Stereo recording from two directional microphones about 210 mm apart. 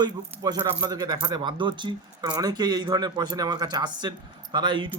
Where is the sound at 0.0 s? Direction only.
20° right (ahead or behind).